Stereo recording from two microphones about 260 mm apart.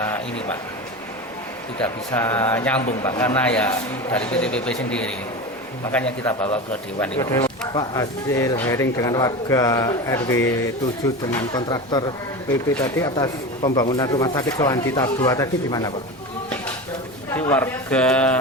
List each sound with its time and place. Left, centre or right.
1.8 s speech: centre
17.3 s speech: centre